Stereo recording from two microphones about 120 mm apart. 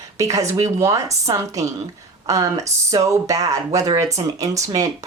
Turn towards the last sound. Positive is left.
turn(degrees=-30)  # may be behind; listen again after turning